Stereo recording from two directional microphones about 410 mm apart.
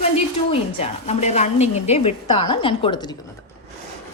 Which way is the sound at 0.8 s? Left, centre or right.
Centre.